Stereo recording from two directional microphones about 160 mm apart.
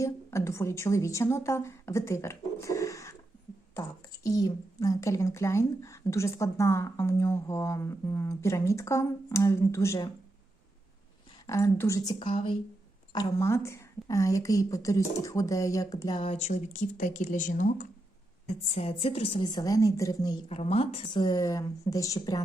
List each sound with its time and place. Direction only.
0.0 s a woman's voice: 15° left (ahead or behind)
11.4 s a woman's voice: 20° left (ahead or behind)
12.2 s speech: 30° left (ahead or behind)
13.1 s a woman's voice: 15° left (ahead or behind)
16.2 s speech: 45° left (ahead or behind)
18.7 s a woman's voice: 40° left (ahead or behind); by 20.4 s 20° left (ahead or behind)
20.5 s a woman's voice: 40° left (ahead or behind); by 22.4 s 25° left (ahead or behind)